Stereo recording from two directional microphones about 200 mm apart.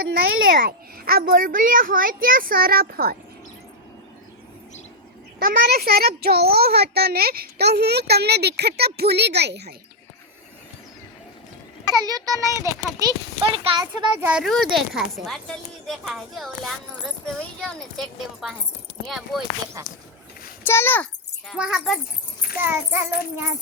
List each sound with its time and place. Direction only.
0.1 s a child's voice: 50° right (ahead or behind)
5.4 s a child's voice: 50° right (ahead or behind)
11.9 s a child's voice: 20° right (ahead or behind)
14.2 s speech: 5° right (ahead or behind)
20.7 s a child's voice: 10° left (ahead or behind); by 23.0 s 10° right (ahead or behind)